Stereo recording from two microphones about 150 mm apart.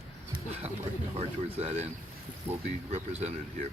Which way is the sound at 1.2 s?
45° right (ahead or behind).